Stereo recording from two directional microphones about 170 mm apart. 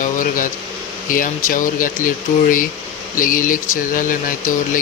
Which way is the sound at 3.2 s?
50° left (ahead or behind).